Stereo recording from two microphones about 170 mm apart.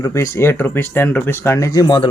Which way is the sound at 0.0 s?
20° left (ahead or behind).